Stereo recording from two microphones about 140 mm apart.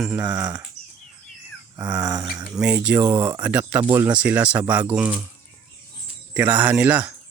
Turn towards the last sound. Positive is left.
turn(degrees=-10)  # may be behind; listen again after turning